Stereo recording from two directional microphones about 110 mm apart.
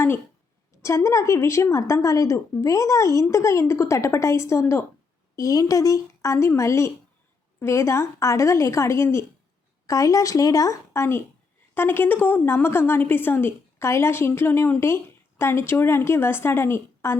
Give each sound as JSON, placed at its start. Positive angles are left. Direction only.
{"t": 0.8, "sound": "a woman's voice", "side_deg": 25}
{"t": 5.4, "sound": "a woman's voice", "side_deg": 30}